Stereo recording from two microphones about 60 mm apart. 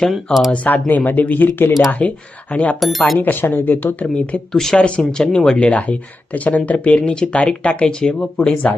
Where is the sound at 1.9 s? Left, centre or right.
Left.